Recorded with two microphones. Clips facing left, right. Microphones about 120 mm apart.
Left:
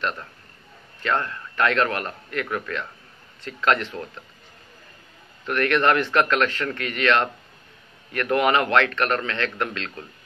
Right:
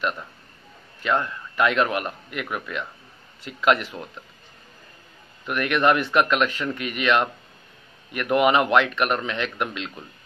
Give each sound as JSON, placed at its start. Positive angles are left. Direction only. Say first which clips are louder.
{"t": 1.0, "sound": "speech", "louder": "right 1 dB", "side_deg": -15}
{"t": 5.4, "sound": "speech", "louder": "left 1 dB", "side_deg": -15}